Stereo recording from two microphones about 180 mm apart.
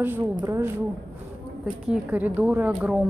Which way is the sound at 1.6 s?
5° right (ahead or behind).